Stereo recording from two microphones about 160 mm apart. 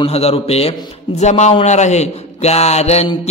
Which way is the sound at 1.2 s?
45° left (ahead or behind).